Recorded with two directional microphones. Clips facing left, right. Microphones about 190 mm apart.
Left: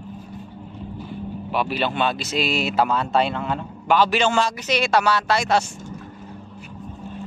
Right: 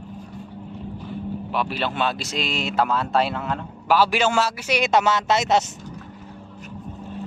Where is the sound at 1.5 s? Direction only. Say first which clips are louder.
Left 3 dB; 5° left (ahead or behind); by 5.6 s 20° right (ahead or behind).